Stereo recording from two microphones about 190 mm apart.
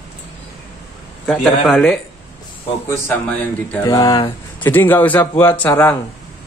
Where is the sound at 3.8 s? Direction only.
20° left (ahead or behind).